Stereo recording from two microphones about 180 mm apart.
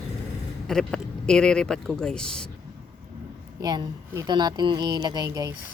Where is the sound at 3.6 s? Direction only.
20° right (ahead or behind).